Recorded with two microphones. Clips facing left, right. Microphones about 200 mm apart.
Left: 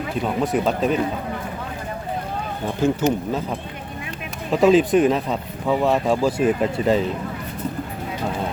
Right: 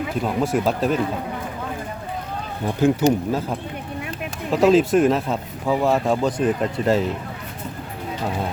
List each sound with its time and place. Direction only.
0.5 s speech: centre (ahead or behind)
2.8 s speech: 10° right (ahead or behind)
4.5 s speech: centre (ahead or behind)